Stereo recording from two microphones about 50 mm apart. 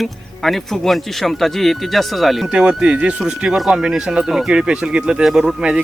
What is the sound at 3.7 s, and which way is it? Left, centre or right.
Speech, centre.